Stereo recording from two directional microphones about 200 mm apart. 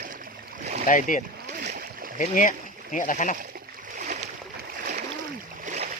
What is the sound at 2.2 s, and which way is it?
Speech, 40° left (ahead or behind).